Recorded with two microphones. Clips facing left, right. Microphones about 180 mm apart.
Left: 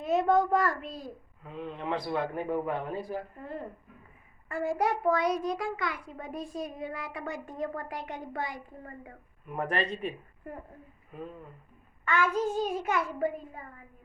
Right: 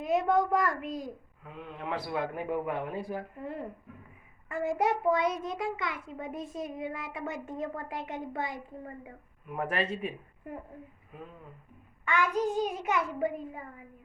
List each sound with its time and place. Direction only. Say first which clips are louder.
0.0 s a child's voice: left 1 dB; 15° right (ahead or behind)
4.4 s a child's voice: even; 20° right (ahead or behind)
9.5 s a child's voice: left 1 dB; 5° right (ahead or behind)
12.0 s a child's voice: left 1 dB; 15° right (ahead or behind)